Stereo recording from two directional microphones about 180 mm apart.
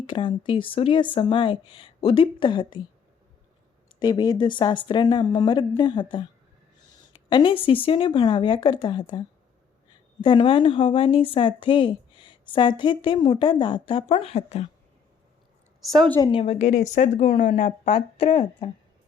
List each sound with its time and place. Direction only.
0.0 s a woman's voice: 25° left (ahead or behind)
4.0 s a woman's voice: 25° left (ahead or behind)
7.3 s a woman's voice: 25° left (ahead or behind)
16.2 s a woman's voice: 30° left (ahead or behind)
18.2 s a woman's voice: 30° left (ahead or behind)